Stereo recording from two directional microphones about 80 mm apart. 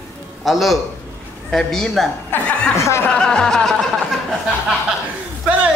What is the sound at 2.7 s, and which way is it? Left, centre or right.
Speech, left.